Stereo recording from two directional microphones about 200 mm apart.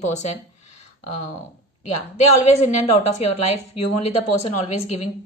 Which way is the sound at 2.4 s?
35° left (ahead or behind).